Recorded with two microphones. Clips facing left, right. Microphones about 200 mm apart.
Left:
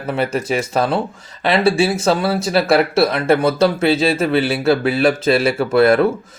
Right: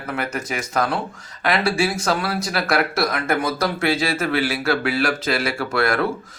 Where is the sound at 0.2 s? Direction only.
30° left (ahead or behind).